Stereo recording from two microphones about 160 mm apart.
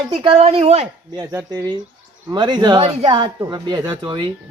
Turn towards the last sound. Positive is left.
turn(degrees=-25)  # may be behind; listen again after turning